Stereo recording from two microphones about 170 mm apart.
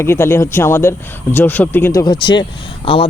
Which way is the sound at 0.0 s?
15° left (ahead or behind).